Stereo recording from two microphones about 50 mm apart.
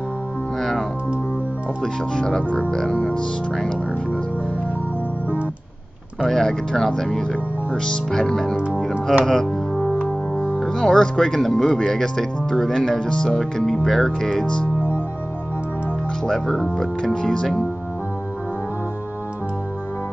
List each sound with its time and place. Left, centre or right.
0.6 s music: centre
1.8 s speech: centre
6.2 s speech: centre
9.0 s music: centre
10.4 s speech: centre
16.3 s speech: centre